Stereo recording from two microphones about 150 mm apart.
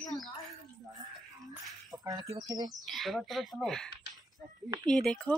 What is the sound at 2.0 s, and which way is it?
Speech, 25° right (ahead or behind).